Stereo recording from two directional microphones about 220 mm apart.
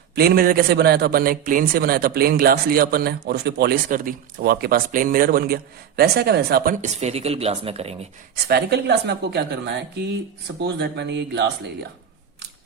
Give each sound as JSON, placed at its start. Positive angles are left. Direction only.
{"t": 0.2, "sound": "a man's voice", "side_deg": -40}
{"t": 8.4, "sound": "a man's voice", "side_deg": -45}